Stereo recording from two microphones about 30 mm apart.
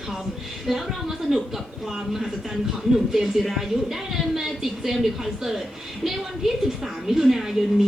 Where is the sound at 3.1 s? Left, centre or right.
Centre.